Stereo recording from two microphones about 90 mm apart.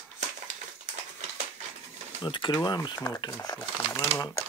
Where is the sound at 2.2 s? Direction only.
65° left (ahead or behind).